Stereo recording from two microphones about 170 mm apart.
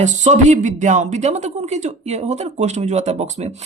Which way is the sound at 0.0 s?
45° right (ahead or behind).